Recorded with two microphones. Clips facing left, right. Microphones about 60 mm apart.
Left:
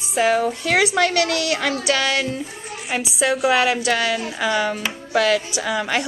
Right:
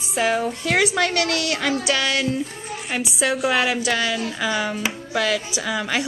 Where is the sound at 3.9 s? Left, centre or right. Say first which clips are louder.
Left 2 dB; centre.